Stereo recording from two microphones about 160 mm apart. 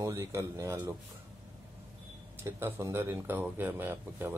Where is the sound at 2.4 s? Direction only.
15° right (ahead or behind).